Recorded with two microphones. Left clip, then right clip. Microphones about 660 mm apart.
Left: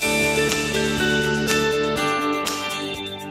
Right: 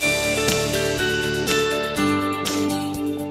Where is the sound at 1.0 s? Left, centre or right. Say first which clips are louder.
Left 1 dB; centre.